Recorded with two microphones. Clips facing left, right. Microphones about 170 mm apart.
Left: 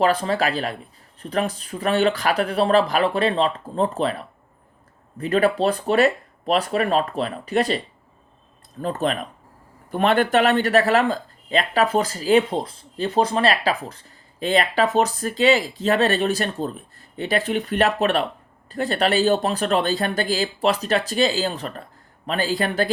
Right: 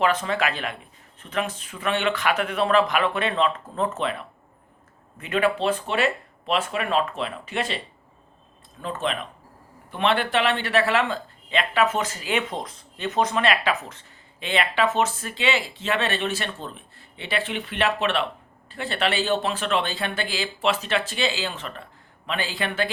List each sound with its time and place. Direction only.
0.0 s speech: 35° left (ahead or behind)
8.8 s speech: 40° left (ahead or behind)